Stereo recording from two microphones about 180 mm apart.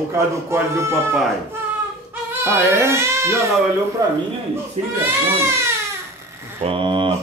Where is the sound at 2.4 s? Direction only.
15° right (ahead or behind).